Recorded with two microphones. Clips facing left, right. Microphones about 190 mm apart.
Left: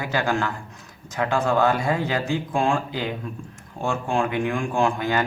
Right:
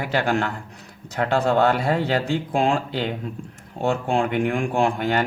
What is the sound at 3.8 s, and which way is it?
Speech, 65° right (ahead or behind).